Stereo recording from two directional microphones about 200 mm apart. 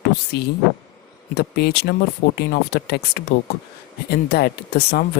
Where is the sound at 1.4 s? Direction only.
55° left (ahead or behind).